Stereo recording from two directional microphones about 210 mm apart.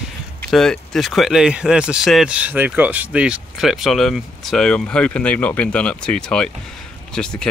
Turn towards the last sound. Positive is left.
turn(degrees=5)  # may be behind; listen again after turning